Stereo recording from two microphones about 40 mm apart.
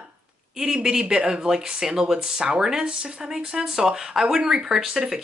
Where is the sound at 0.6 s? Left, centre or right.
Centre.